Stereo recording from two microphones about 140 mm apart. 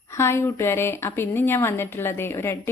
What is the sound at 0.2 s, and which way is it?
A woman's voice, 20° left (ahead or behind).